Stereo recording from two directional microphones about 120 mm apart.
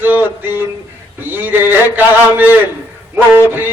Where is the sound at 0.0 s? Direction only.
15° right (ahead or behind).